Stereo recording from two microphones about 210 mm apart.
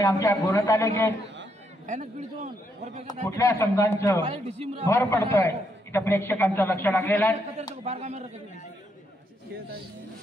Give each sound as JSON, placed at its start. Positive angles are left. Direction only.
{"t": 0.0, "sound": "a man's voice", "side_deg": 15}
{"t": 1.9, "sound": "a man's voice", "side_deg": -35}
{"t": 3.3, "sound": "a man's voice", "side_deg": 15}
{"t": 4.3, "sound": "speech", "side_deg": -30}
{"t": 4.8, "sound": "a man's voice", "side_deg": 15}
{"t": 7.8, "sound": "a man's voice", "side_deg": -30}